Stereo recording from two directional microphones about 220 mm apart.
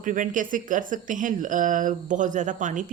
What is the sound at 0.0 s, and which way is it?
Speech, 35° right (ahead or behind).